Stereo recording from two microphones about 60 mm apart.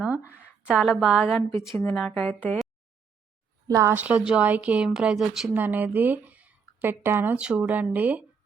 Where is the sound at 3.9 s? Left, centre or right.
Right.